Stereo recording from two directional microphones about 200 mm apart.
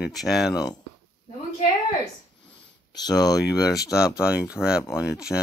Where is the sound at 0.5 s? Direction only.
20° left (ahead or behind).